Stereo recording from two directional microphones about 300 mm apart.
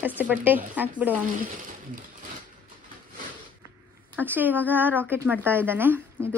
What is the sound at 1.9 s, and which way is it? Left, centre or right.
Speech, right.